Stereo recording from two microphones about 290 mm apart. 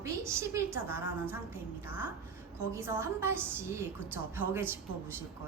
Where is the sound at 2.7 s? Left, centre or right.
Centre.